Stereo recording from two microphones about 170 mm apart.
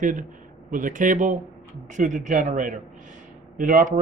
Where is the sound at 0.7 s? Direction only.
50° right (ahead or behind).